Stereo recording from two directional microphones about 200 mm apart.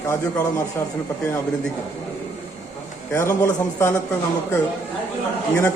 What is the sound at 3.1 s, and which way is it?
Speech, 10° left (ahead or behind).